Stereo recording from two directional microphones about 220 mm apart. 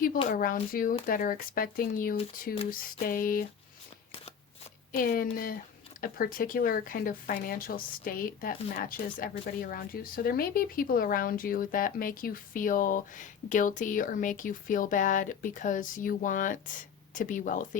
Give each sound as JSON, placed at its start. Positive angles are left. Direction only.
{"t": 0.3, "sound": "speech", "side_deg": 40}
{"t": 4.9, "sound": "speech", "side_deg": 40}